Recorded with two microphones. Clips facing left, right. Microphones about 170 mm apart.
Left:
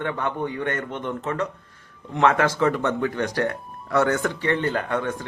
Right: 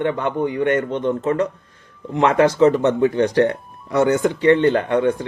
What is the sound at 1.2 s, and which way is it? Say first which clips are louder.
Speech: right 6 dB; 40° right (ahead or behind).